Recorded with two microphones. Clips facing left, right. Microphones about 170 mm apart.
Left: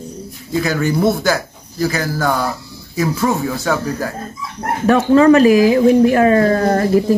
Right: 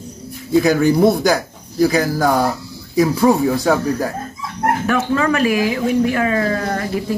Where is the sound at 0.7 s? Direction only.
15° right (ahead or behind).